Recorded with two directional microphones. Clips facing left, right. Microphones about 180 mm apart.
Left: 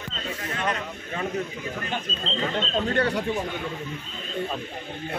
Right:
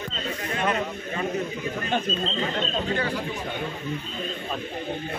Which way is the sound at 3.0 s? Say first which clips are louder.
Left 4 dB; 65° left (ahead or behind).